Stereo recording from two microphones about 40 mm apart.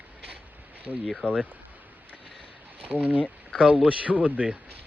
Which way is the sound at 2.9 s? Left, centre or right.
Right.